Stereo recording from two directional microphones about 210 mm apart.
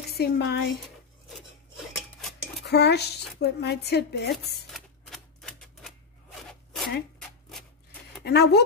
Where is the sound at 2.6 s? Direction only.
50° left (ahead or behind).